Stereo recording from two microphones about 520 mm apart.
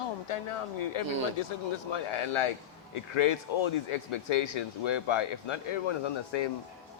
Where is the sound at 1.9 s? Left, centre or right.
Left.